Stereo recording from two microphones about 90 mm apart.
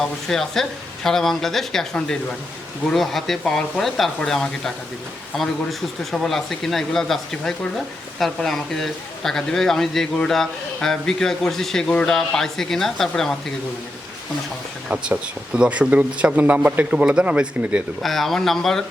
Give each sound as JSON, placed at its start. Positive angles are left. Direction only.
{"t": 0.0, "sound": "a man's voice", "side_deg": 5}
{"t": 14.8, "sound": "speech", "side_deg": -10}
{"t": 18.0, "sound": "a man's voice", "side_deg": 0}